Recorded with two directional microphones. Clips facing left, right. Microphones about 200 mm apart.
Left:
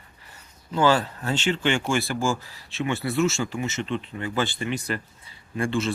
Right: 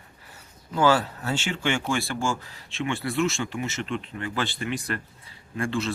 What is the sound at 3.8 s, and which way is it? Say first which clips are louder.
Speech: left 2 dB; 35° left (ahead or behind).